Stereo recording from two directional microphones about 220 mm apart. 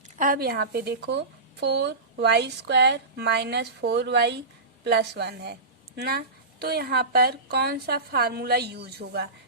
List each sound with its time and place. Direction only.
0.2 s a woman's voice: 40° right (ahead or behind)